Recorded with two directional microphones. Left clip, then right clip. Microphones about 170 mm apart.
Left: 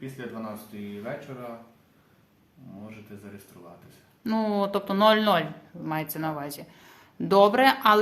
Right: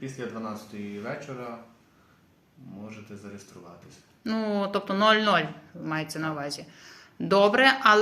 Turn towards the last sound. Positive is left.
turn(degrees=20)  # may be behind; listen again after turning